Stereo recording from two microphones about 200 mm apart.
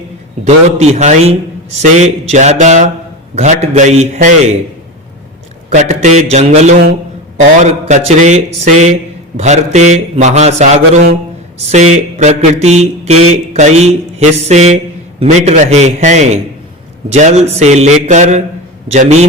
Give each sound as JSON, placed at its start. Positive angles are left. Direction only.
{"t": 0.4, "sound": "a man's voice", "side_deg": -35}
{"t": 5.7, "sound": "a man's voice", "side_deg": -35}